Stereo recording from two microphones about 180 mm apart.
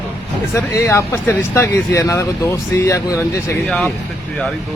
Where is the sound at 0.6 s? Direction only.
15° left (ahead or behind).